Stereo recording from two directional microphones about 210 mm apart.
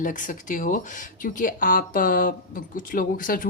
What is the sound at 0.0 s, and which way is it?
Speech, 40° left (ahead or behind).